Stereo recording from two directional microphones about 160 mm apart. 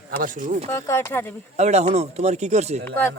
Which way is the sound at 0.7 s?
15° left (ahead or behind).